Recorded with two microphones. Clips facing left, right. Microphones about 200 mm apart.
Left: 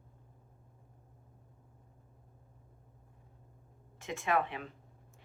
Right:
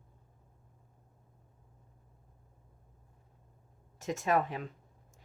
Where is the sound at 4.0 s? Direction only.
40° right (ahead or behind).